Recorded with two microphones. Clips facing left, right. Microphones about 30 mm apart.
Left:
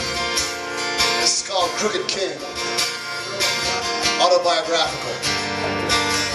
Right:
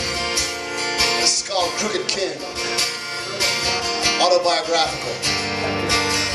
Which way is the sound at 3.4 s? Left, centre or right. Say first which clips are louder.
Right 1 dB; right.